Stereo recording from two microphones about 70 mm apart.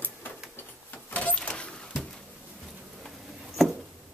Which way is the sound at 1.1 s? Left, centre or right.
Left.